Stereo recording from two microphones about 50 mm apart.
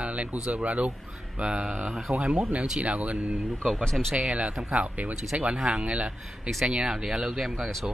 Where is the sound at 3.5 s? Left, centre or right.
Centre.